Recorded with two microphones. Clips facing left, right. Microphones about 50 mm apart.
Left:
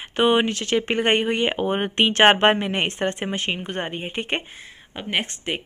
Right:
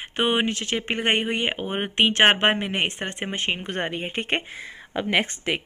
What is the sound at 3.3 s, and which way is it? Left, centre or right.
Speech, right.